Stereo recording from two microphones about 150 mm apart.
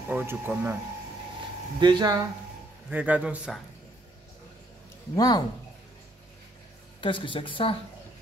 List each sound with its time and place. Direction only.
0.1 s speech: 10° right (ahead or behind)
1.8 s speech: 30° right (ahead or behind)
2.9 s speech: 10° right (ahead or behind)
5.1 s speech: 25° left (ahead or behind)
7.0 s speech: 35° left (ahead or behind)